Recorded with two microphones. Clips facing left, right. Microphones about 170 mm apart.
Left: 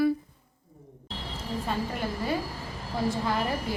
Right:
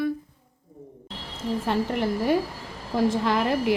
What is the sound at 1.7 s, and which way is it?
A woman's voice, 70° right (ahead or behind).